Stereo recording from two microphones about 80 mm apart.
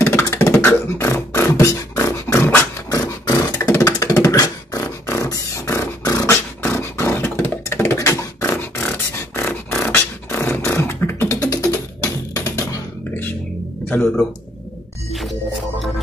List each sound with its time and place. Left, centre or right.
0.0 s beatboxing: left
2.9 s a sound: left
3.7 s beatboxing: left
6.6 s beatboxing: left
7.0 s a sound: left
8.0 s beatboxing: left
9.3 s beatboxing: left
11.3 s music: left
13.9 s speech: left
15.1 s music: centre